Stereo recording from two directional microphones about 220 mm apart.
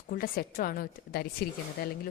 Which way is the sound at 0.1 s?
40° left (ahead or behind).